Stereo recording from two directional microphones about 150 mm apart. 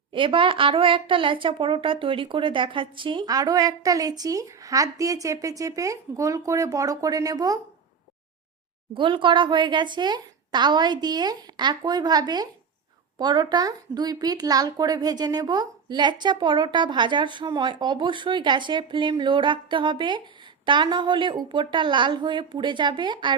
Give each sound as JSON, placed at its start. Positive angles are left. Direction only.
{"t": 0.1, "sound": "speech", "side_deg": -35}
{"t": 9.0, "sound": "speech", "side_deg": -35}